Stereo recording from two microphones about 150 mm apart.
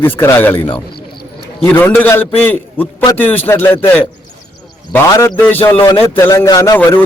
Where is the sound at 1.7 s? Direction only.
15° left (ahead or behind).